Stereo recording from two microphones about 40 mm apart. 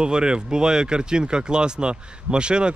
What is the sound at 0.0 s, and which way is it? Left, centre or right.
Speech, right.